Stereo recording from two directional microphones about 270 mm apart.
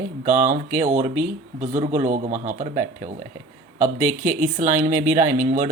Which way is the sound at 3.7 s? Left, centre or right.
Right.